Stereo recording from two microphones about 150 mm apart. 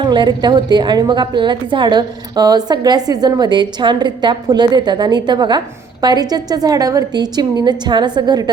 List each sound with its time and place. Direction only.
0.0 s a woman's voice: 30° right (ahead or behind)